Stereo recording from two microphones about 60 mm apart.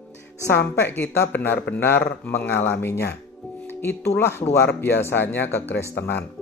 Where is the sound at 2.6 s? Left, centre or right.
Left.